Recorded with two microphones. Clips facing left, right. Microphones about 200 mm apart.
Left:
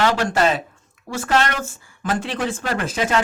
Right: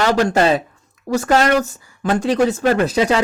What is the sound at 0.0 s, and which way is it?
Speech, 40° right (ahead or behind).